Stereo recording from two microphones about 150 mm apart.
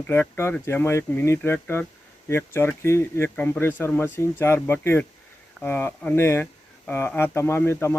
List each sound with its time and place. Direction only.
0.1 s speech: 15° left (ahead or behind)